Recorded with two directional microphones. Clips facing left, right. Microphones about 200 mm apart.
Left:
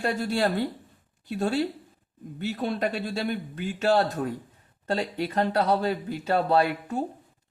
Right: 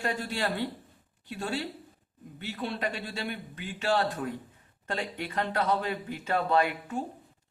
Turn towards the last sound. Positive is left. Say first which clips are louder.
# left 4 dB
turn(degrees=35)  # may be behind; listen again after turning